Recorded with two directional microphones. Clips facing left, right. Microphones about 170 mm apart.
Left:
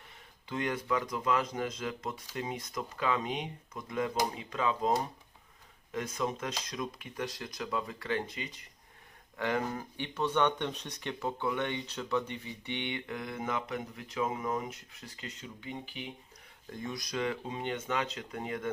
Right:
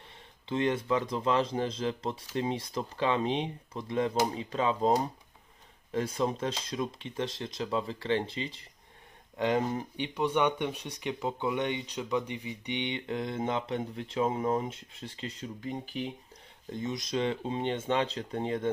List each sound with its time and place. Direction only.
0.4 s speech: 25° right (ahead or behind)
16.6 s speech: 20° right (ahead or behind)